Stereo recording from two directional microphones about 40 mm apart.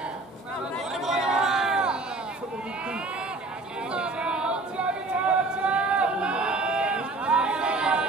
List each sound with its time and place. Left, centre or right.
1.0 s chatter: centre
3.9 s singing: right